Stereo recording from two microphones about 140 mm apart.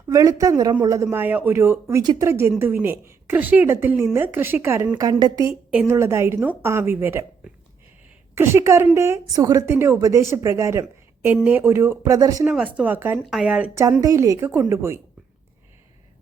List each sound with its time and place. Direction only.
0.1 s a woman's voice: 25° right (ahead or behind)
1.1 s a woman's voice: 10° right (ahead or behind)
4.9 s a woman's voice: 25° right (ahead or behind)
5.7 s a woman's voice: 15° right (ahead or behind)
8.4 s a woman's voice: 20° right (ahead or behind)
12.5 s a woman's voice: 10° right (ahead or behind)
14.0 s a woman's voice: 25° right (ahead or behind)